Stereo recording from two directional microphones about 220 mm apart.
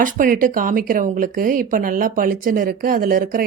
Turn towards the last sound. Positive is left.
turn(degrees=-40)  # may be behind; listen again after turning